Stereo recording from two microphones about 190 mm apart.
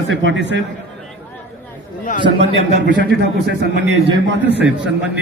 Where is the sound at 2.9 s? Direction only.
65° right (ahead or behind).